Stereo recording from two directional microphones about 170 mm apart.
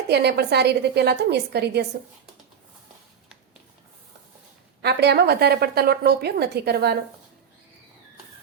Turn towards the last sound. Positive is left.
turn(degrees=-70)  # may be behind; listen again after turning